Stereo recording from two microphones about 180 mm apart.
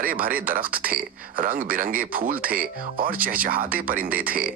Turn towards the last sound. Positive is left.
turn(degrees=-55)  # may be behind; listen again after turning